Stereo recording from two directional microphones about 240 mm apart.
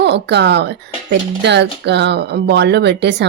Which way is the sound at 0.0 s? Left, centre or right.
Right.